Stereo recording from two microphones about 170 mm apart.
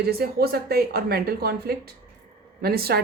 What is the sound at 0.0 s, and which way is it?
A woman's voice, 65° right (ahead or behind).